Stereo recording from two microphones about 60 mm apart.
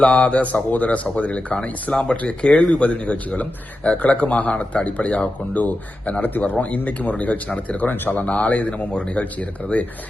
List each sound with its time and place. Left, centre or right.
0.0 s speech: centre